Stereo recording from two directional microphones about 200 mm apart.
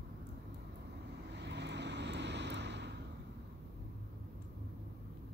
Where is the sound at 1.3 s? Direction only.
60° right (ahead or behind).